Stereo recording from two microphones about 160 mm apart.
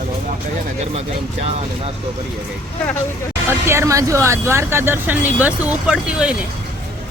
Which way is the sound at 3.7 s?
20° right (ahead or behind).